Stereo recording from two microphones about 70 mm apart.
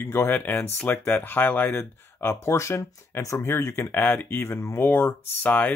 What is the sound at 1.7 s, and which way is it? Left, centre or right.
Speech, left.